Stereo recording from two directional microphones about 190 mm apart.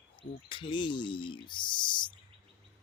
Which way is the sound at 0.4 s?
25° left (ahead or behind).